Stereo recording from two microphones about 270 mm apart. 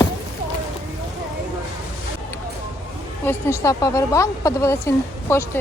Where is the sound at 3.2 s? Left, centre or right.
Centre.